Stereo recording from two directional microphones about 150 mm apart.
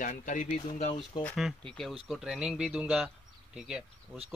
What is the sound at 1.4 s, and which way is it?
Speech, centre (ahead or behind).